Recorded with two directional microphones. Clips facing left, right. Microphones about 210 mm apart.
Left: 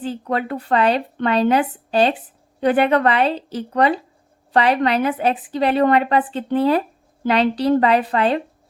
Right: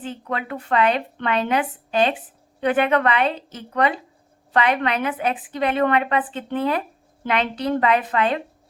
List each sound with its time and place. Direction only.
0.0 s a woman's voice: 35° left (ahead or behind)